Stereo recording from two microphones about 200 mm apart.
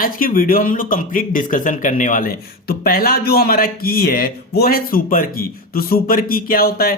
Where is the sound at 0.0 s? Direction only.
45° left (ahead or behind).